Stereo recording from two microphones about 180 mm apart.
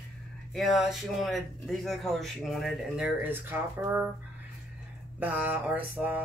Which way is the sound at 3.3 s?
10° right (ahead or behind).